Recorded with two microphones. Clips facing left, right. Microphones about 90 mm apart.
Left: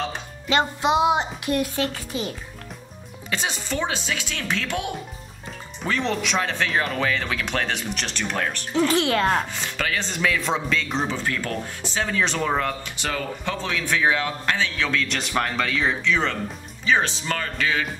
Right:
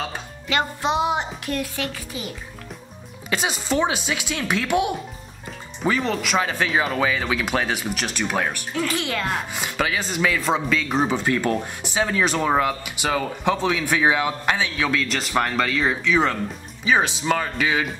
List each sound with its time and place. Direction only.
0.5 s a woman's voice: 20° left (ahead or behind)
3.3 s speech: 10° right (ahead or behind)
5.8 s speech: 5° right (ahead or behind)
8.7 s speech: 30° left (ahead or behind)
9.5 s speech: 10° right (ahead or behind)
11.1 s speech: 20° right (ahead or behind)